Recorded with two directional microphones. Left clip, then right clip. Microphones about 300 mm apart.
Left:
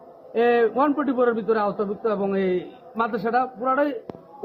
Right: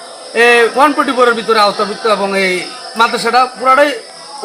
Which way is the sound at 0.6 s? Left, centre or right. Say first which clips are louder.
Right 11 dB; centre.